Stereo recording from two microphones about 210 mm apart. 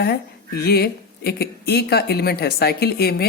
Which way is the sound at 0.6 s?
50° left (ahead or behind).